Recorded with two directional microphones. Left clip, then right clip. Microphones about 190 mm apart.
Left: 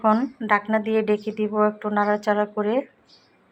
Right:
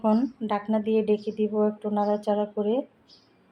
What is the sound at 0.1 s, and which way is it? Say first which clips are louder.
Speech: left 6 dB; 5° right (ahead or behind).